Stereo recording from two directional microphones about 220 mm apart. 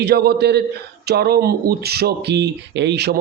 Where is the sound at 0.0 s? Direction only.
45° right (ahead or behind).